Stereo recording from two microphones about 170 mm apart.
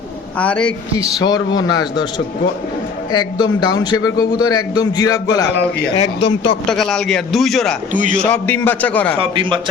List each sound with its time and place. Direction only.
0.3 s a man's voice: 5° left (ahead or behind)
0.9 s a man's voice: 25° left (ahead or behind)
6.1 s speech: 90° left
6.7 s a man's voice: 5° left (ahead or behind)
7.9 s a man's voice: 50° right (ahead or behind)
8.2 s a man's voice: 10° left (ahead or behind)
9.3 s a man's voice: 30° right (ahead or behind)